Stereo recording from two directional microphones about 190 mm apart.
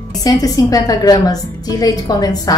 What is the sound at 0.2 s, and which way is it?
A woman's voice, 20° left (ahead or behind).